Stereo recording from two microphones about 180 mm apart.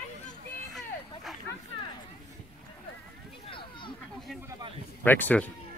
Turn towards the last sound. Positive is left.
turn(degrees=10)  # may be behind; listen again after turning